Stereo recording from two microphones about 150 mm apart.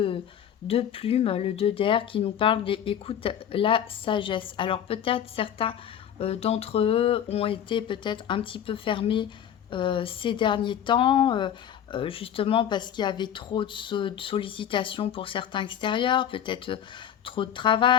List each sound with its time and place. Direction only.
0.7 s speech: 40° left (ahead or behind)